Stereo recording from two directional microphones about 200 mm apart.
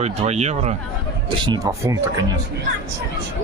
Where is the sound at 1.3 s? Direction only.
20° right (ahead or behind).